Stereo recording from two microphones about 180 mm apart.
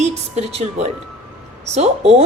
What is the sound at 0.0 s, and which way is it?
A woman's voice, 35° right (ahead or behind).